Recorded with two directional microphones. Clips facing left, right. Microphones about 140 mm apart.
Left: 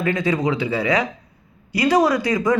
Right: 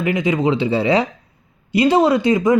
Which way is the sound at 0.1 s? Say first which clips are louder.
Right 4 dB; 25° right (ahead or behind).